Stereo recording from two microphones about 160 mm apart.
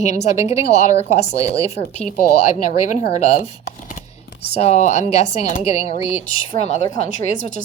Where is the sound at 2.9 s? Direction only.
45° left (ahead or behind).